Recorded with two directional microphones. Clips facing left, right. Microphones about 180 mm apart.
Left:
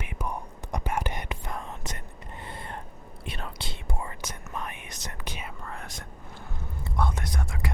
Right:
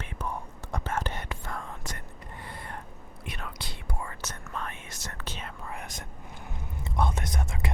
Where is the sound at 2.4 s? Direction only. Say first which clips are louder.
Left 2 dB; 25° left (ahead or behind).